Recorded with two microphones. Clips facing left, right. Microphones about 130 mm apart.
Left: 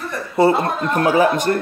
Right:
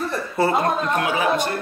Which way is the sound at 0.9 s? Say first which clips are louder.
Left 5 dB; 40° left (ahead or behind).